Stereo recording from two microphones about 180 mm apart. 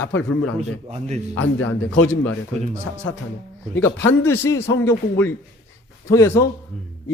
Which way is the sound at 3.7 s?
10° left (ahead or behind).